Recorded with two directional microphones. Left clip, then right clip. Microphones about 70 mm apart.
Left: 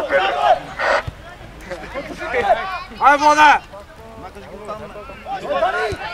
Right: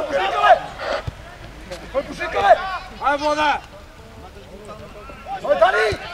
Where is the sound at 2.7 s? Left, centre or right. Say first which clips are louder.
Left 7 dB; left.